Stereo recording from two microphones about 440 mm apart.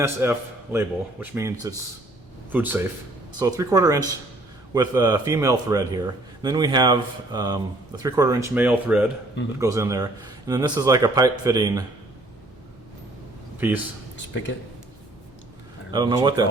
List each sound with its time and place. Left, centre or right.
0.0 s a man's voice: centre
13.6 s a man's voice: centre
14.2 s speech: left
15.9 s speech: centre